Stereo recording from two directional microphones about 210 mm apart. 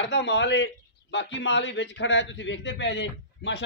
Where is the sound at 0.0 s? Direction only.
55° left (ahead or behind).